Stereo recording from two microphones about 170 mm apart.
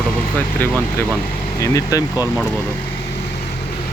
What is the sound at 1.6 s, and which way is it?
Speech, 20° left (ahead or behind).